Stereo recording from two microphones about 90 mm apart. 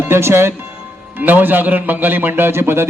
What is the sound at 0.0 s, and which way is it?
A man's voice, 30° right (ahead or behind).